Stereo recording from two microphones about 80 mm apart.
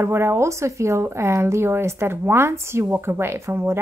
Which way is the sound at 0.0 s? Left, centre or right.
Right.